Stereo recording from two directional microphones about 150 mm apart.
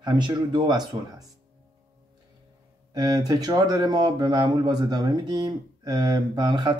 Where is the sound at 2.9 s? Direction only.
25° right (ahead or behind).